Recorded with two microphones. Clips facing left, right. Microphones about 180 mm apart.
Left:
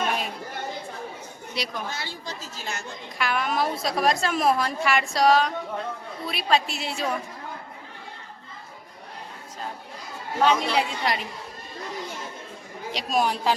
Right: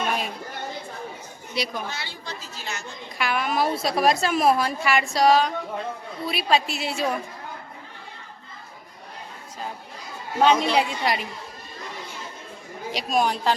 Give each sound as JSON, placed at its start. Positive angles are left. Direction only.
{"t": 1.5, "sound": "a woman's voice", "side_deg": 0}
{"t": 1.9, "sound": "speech", "side_deg": 45}
{"t": 3.2, "sound": "a woman's voice", "side_deg": -5}
{"t": 10.4, "sound": "a woman's voice", "side_deg": -20}
{"t": 12.9, "sound": "a woman's voice", "side_deg": 0}